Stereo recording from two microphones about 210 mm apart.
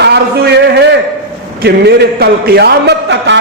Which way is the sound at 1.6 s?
50° right (ahead or behind).